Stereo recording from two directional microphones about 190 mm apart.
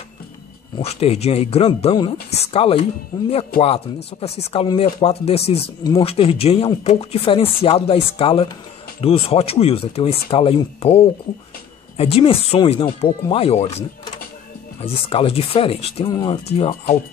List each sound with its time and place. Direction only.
0.7 s speech: 35° left (ahead or behind)
16.1 s speech: 20° left (ahead or behind)